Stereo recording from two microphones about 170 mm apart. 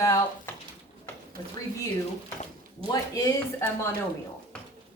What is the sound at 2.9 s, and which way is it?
Speech, 20° left (ahead or behind).